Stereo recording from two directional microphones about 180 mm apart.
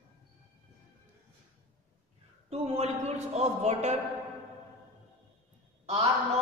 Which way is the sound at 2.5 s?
35° right (ahead or behind).